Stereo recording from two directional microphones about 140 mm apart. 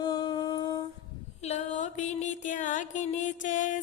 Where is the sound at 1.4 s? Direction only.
50° left (ahead or behind).